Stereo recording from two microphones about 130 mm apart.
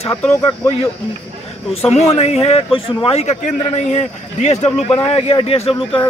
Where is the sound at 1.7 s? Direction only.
50° left (ahead or behind).